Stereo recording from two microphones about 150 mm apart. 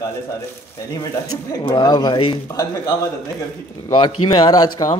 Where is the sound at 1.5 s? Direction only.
25° left (ahead or behind).